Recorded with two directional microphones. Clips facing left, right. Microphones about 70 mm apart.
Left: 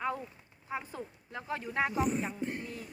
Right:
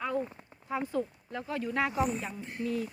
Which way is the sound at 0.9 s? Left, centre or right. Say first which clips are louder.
Right 10 dB; left.